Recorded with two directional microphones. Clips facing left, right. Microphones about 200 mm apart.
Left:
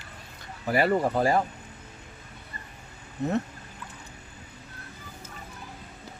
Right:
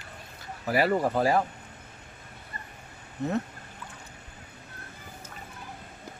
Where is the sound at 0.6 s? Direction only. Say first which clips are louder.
Left 1 dB; centre (ahead or behind).